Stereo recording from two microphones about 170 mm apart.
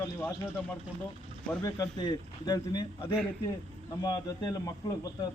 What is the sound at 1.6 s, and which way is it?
A man's voice, 20° left (ahead or behind).